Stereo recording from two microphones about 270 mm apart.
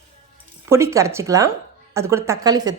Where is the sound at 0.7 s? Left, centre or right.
Centre.